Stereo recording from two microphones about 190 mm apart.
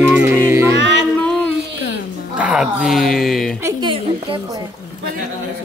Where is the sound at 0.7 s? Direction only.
70° right (ahead or behind).